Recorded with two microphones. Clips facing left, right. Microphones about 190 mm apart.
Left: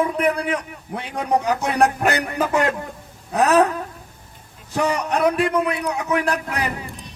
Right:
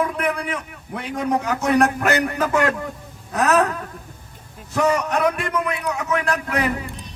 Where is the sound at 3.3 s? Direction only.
35° left (ahead or behind).